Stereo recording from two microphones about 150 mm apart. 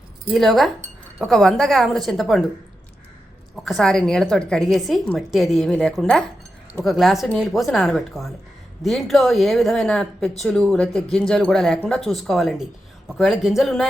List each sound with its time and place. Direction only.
0.3 s a woman's voice: centre (ahead or behind)
3.5 s a woman's voice: centre (ahead or behind)